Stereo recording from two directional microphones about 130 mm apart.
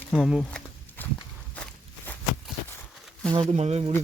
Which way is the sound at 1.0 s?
15° left (ahead or behind).